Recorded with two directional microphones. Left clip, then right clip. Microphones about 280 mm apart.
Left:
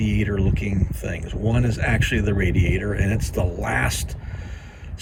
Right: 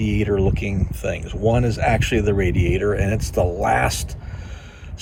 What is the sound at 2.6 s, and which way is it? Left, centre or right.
Speech, right.